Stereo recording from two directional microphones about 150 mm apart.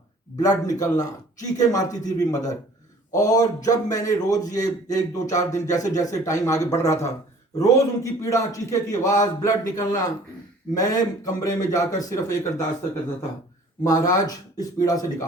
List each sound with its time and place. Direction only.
0.3 s a man's voice: 25° left (ahead or behind)
13.8 s a man's voice: 25° left (ahead or behind)